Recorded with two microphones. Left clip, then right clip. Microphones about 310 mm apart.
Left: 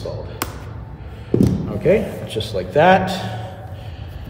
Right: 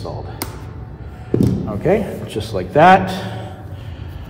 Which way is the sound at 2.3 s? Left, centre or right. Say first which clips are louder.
Right 3 dB; centre.